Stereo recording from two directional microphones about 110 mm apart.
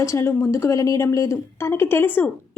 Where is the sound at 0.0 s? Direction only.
30° left (ahead or behind).